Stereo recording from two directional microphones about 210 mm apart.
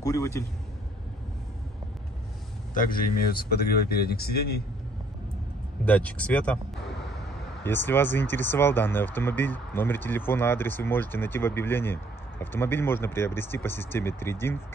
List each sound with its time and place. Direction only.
0.0 s a man's voice: 15° left (ahead or behind)
2.7 s speech: 40° left (ahead or behind)
5.9 s speech: 5° left (ahead or behind)
7.6 s speech: 10° left (ahead or behind)